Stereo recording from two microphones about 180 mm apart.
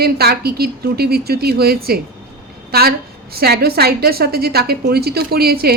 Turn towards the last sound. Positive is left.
turn(degrees=-60)  # may be behind; listen again after turning